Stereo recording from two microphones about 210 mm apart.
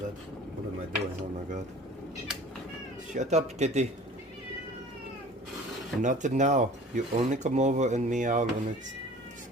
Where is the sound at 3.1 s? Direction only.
30° right (ahead or behind).